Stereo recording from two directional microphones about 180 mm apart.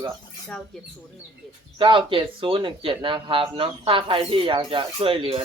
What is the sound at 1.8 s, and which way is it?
Speech, 30° right (ahead or behind).